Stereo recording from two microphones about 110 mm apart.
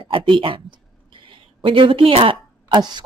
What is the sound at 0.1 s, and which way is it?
Speech, 50° right (ahead or behind).